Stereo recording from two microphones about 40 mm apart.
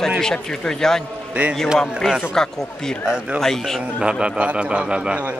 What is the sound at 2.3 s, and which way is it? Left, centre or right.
Speech, centre.